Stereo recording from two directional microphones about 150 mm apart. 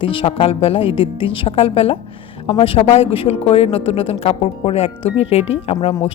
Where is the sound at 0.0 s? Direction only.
35° left (ahead or behind).